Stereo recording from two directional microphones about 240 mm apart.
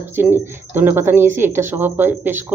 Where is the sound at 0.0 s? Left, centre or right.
Centre.